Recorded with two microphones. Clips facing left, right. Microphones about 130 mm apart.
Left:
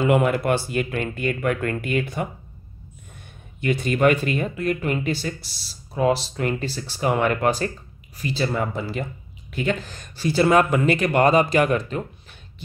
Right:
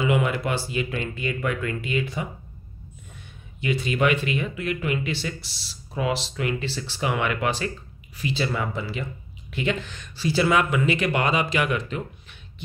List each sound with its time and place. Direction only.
0.0 s speech: 50° left (ahead or behind)